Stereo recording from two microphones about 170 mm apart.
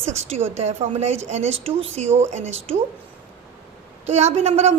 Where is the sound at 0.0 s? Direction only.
40° right (ahead or behind).